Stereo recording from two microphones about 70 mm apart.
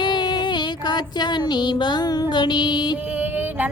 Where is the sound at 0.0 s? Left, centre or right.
Left.